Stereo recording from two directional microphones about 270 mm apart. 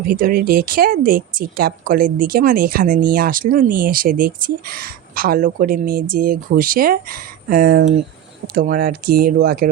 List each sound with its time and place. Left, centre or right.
0.1 s speech: right